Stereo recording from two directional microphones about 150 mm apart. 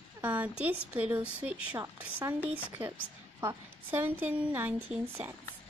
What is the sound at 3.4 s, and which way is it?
Speech, 15° right (ahead or behind).